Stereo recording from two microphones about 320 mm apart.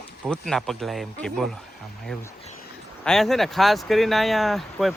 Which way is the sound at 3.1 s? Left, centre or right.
Centre.